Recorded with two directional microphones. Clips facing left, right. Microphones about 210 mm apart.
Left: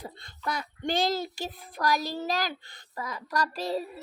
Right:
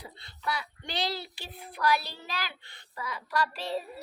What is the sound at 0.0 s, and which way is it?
Speech, 45° left (ahead or behind).